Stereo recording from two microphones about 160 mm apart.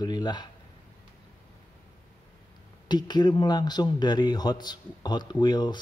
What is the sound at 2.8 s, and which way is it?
Speech, 25° left (ahead or behind).